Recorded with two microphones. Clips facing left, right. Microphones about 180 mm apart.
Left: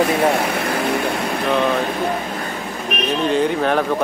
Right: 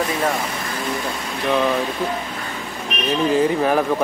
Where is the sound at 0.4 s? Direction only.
65° left (ahead or behind).